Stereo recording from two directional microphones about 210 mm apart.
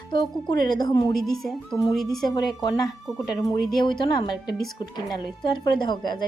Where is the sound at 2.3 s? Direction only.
20° left (ahead or behind).